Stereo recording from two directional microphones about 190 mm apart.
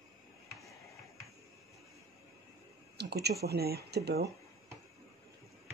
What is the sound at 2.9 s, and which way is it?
Speech, 60° right (ahead or behind).